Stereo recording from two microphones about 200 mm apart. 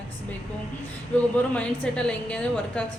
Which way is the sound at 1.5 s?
5° left (ahead or behind).